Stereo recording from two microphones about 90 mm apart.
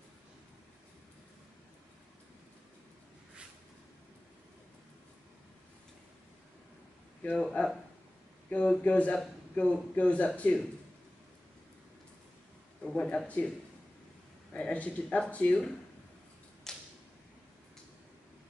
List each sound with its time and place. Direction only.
7.3 s speech: 5° left (ahead or behind)
8.5 s speech: 15° left (ahead or behind)
12.8 s speech: 5° left (ahead or behind)
14.5 s speech: 15° left (ahead or behind)
16.7 s a sound: 5° left (ahead or behind)